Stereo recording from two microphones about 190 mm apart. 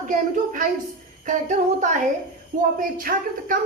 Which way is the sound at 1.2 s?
40° right (ahead or behind).